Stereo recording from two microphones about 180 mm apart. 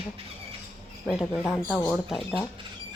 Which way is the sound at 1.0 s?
5° left (ahead or behind).